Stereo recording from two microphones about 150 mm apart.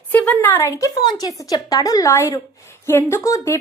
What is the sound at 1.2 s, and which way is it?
A woman's voice, 25° left (ahead or behind).